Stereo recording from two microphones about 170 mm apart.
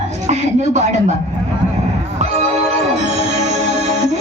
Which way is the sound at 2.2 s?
40° right (ahead or behind).